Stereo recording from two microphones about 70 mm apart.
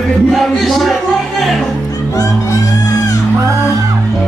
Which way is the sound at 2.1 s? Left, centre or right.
Left.